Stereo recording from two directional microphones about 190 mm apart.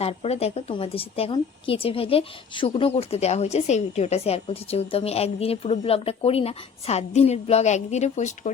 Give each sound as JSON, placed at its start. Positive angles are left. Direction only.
{"t": 0.0, "sound": "a woman's voice", "side_deg": 30}